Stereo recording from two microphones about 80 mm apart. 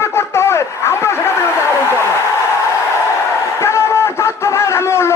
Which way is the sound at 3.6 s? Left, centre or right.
Left.